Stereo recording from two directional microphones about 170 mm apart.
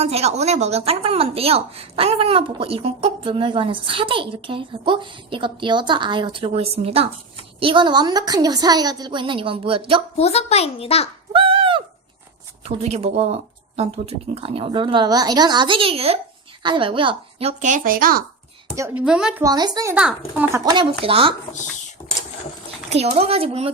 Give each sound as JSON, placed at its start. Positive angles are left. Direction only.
{"t": 0.0, "sound": "a woman's voice", "side_deg": -40}
{"t": 10.2, "sound": "a child's voice", "side_deg": 35}
{"t": 11.3, "sound": "a sound", "side_deg": -30}
{"t": 12.6, "sound": "a woman's voice", "side_deg": -40}
{"t": 17.6, "sound": "speech", "side_deg": -50}
{"t": 18.8, "sound": "a woman's voice", "side_deg": -10}
{"t": 19.4, "sound": "a woman's voice", "side_deg": -20}
{"t": 20.0, "sound": "a woman's voice", "side_deg": -5}
{"t": 21.0, "sound": "speech", "side_deg": -30}
{"t": 22.9, "sound": "speech", "side_deg": -40}